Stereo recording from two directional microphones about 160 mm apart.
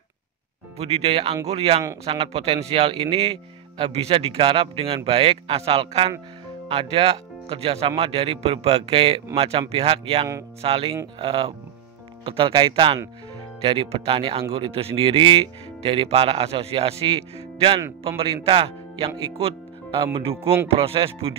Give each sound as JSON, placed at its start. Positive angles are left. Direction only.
{"t": 0.7, "sound": "a man's voice", "side_deg": -40}